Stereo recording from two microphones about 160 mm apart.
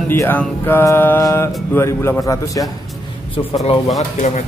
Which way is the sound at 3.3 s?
35° left (ahead or behind).